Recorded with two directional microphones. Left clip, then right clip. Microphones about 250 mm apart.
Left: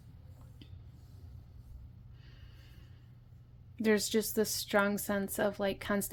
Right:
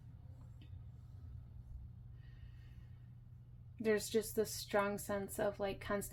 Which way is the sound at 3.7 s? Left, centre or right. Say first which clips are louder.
Left 5 dB; left.